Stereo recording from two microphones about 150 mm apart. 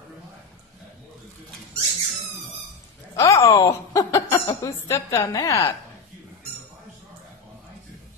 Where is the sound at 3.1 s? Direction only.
20° left (ahead or behind).